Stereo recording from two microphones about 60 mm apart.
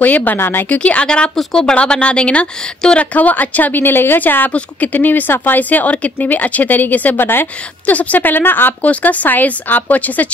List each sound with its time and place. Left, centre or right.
0.0 s a woman's voice: left
0.8 s a woman's voice: centre; by 7.4 s left
7.8 s speech: left